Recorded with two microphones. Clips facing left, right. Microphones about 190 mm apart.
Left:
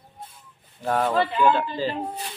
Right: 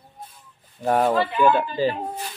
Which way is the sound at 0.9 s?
15° right (ahead or behind).